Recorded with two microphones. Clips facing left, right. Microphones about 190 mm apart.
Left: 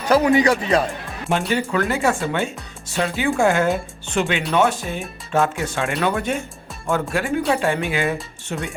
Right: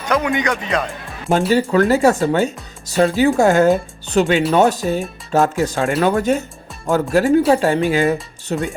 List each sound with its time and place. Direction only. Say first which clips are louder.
0.1 s speech: left 3 dB; 35° left (ahead or behind)
1.3 s speech: right 6 dB; 35° right (ahead or behind)